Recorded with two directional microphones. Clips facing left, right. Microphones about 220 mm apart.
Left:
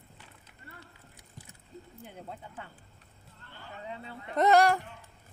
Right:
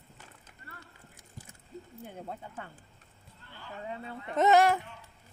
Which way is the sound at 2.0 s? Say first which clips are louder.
Right 3 dB; 50° right (ahead or behind).